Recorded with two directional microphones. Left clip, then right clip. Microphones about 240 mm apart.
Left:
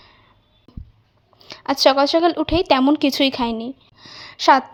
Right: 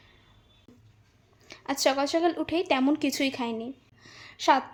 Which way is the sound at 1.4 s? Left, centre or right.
Left.